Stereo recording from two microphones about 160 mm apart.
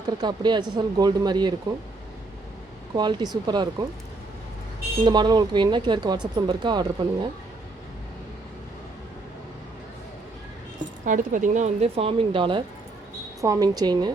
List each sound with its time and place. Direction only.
0.0 s speech: 25° right (ahead or behind)
2.9 s speech: 25° right (ahead or behind)
5.0 s speech: 25° right (ahead or behind)
11.0 s speech: 55° right (ahead or behind); by 14.1 s 25° right (ahead or behind)